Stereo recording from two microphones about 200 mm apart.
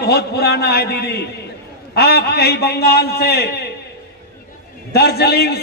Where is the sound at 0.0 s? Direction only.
55° left (ahead or behind).